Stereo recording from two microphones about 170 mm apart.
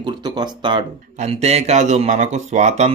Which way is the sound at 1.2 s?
40° right (ahead or behind).